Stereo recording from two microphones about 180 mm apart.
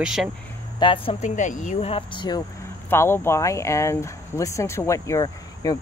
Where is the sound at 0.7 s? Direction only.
30° left (ahead or behind).